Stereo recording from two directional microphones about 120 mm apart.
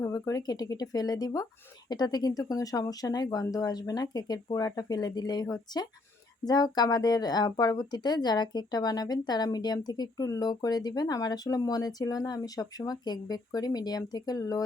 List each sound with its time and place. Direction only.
0.0 s speech: 30° left (ahead or behind)